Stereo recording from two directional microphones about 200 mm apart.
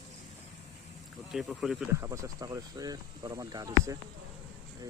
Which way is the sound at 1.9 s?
15° right (ahead or behind).